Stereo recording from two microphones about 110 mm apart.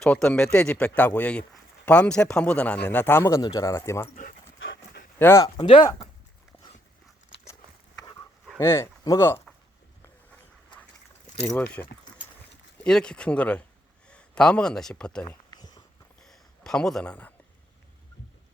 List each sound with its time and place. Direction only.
0.0 s speech: 5° left (ahead or behind); by 4.1 s 25° left (ahead or behind)
5.2 s speech: 25° left (ahead or behind)
5.5 s speech: 50° left (ahead or behind)
7.9 s dog: 35° left (ahead or behind)
8.5 s speech: 25° left (ahead or behind)
11.5 s speech: 15° left (ahead or behind)
15.4 s a sound: 35° left (ahead or behind)
16.2 s a sound: 5° left (ahead or behind)